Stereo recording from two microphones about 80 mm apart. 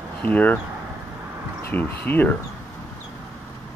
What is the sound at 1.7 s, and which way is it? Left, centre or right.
Speech, left.